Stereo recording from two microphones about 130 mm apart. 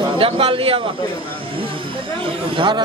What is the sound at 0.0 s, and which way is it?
Speech, 40° right (ahead or behind).